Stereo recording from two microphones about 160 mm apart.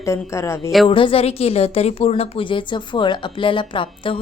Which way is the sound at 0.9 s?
35° left (ahead or behind).